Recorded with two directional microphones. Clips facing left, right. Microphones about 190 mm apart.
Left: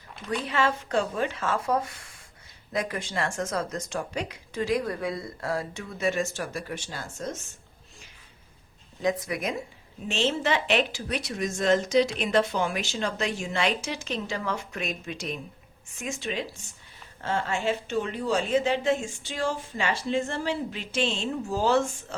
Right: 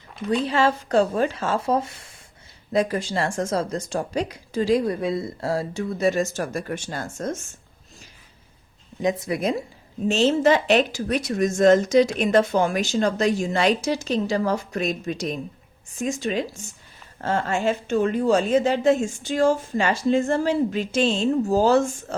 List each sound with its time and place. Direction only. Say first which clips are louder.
0.3 s speech: right 6 dB; 30° right (ahead or behind); by 7.3 s 50° right (ahead or behind)
9.0 s a woman's voice: right 4 dB; 25° right (ahead or behind); by 21.8 s 40° right (ahead or behind)